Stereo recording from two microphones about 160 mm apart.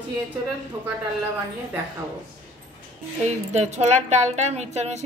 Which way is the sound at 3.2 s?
45° right (ahead or behind).